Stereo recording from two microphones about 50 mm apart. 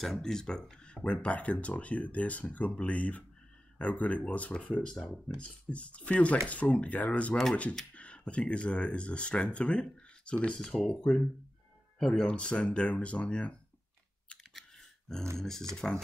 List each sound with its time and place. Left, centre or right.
0.0 s speech: centre; by 4.8 s left
4.8 s speech: centre
5.4 s speech: left
12.0 s speech: centre
12.3 s speech: left
14.5 s typing: centre
15.3 s speech: centre